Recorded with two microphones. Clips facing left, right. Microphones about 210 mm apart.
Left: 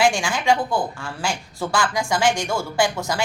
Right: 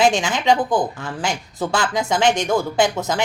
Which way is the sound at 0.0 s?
20° right (ahead or behind).